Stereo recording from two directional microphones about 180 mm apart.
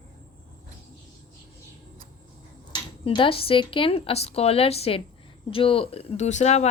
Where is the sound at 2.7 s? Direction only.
25° left (ahead or behind).